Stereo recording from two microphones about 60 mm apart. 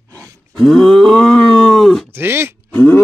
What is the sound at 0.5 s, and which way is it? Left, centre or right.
Groan, centre.